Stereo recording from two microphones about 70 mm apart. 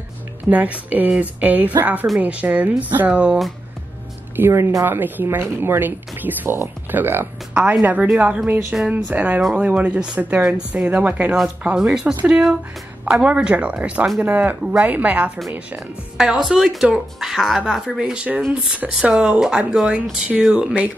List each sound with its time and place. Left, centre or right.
0.5 s speech: right
4.4 s speech: right
16.2 s a woman's voice: centre